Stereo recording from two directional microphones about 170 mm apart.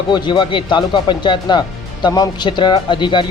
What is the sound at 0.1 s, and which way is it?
Speech, 25° left (ahead or behind).